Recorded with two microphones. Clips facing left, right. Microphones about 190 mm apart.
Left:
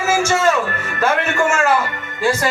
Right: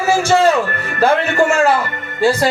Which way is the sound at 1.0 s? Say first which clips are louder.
Right 4 dB; 35° right (ahead or behind).